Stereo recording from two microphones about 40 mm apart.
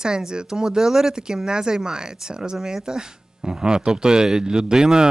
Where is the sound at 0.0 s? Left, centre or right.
Centre.